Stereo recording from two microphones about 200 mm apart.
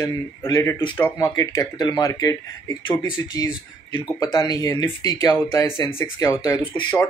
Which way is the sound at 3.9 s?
20° left (ahead or behind).